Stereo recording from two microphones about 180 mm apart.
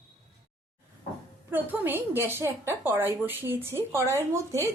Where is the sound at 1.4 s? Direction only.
10° right (ahead or behind).